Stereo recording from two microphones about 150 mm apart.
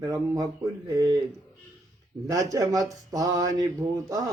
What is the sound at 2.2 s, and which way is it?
Speech, 25° right (ahead or behind).